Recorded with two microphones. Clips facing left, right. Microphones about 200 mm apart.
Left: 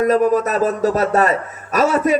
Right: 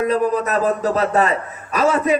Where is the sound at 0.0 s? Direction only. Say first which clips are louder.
Left 3 dB; 45° left (ahead or behind).